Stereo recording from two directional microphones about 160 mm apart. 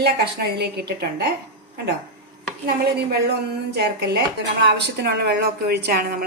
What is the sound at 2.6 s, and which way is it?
A woman's voice, 85° right.